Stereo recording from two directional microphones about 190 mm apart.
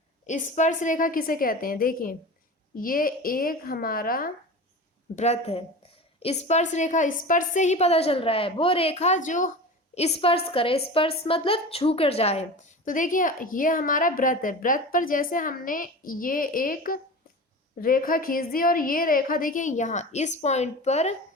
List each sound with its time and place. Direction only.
0.3 s a woman's voice: 40° left (ahead or behind)
5.1 s a woman's voice: 35° left (ahead or behind)